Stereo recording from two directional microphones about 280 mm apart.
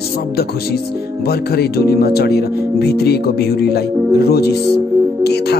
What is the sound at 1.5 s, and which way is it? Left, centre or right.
Speech, left.